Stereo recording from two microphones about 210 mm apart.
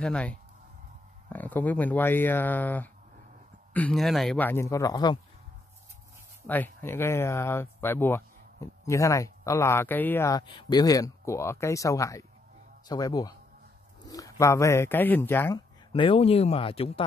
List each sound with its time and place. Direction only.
0.0 s speech: 5° left (ahead or behind)
6.4 s speech: 10° left (ahead or behind)
14.0 s bird: 15° left (ahead or behind)
14.4 s speech: 15° left (ahead or behind)
15.9 s speech: 25° left (ahead or behind)